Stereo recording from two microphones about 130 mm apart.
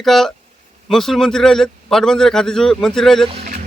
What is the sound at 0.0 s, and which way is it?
Speech, centre (ahead or behind).